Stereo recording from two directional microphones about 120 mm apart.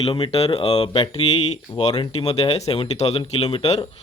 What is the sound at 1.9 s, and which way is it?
Speech, 45° left (ahead or behind).